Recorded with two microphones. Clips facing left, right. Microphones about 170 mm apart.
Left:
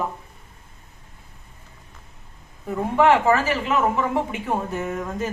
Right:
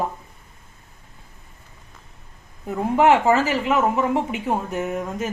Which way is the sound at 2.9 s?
20° right (ahead or behind).